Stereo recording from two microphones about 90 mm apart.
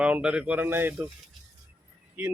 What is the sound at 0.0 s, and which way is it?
Speech, 10° right (ahead or behind).